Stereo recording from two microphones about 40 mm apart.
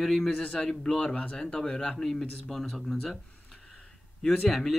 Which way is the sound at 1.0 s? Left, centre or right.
Left.